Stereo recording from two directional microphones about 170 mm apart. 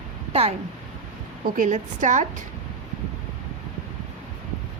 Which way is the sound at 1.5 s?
50° right (ahead or behind).